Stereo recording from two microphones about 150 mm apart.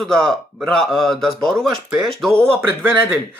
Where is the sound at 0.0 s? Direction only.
5° left (ahead or behind).